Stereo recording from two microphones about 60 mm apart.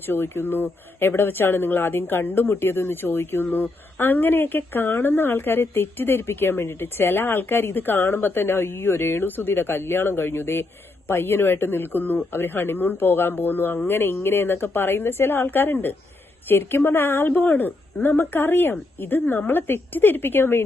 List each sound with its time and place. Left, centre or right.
0.1 s speech: left